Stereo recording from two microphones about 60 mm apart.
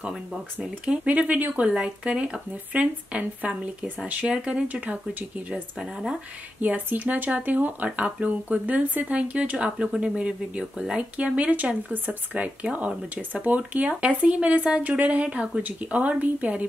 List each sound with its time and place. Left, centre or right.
1.0 s speech: right
6.6 s speech: right